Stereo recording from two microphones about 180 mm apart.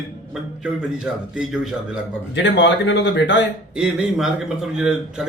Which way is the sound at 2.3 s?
80° left.